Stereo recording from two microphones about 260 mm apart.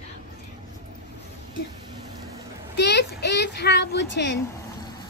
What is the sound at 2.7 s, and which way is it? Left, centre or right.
Child singing, left.